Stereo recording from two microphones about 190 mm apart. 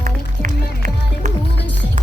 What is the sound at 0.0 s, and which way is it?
Music, 45° right (ahead or behind).